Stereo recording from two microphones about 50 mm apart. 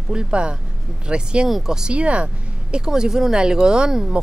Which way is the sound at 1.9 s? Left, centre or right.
Right.